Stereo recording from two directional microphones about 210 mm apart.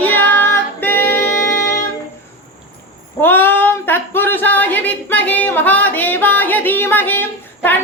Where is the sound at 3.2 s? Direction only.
10° left (ahead or behind).